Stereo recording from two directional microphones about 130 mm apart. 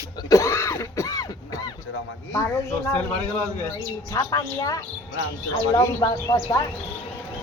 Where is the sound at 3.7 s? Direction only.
25° left (ahead or behind).